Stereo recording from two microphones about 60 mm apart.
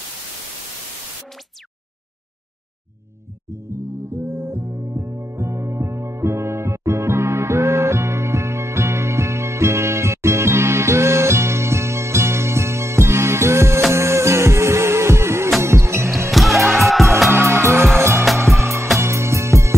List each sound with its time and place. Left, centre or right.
3.6 s music: right
16.3 s music: centre
17.3 s music: right
18.2 s music: centre
18.6 s music: right